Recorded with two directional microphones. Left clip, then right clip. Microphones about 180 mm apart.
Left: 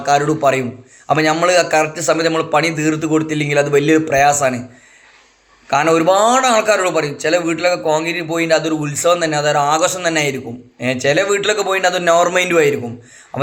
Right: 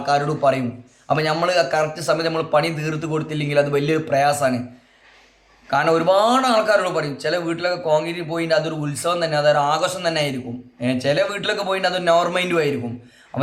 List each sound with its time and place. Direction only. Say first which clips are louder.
0.0 s a man's voice: left 4 dB; 15° left (ahead or behind)
5.7 s a man's voice: left 4 dB; 15° left (ahead or behind)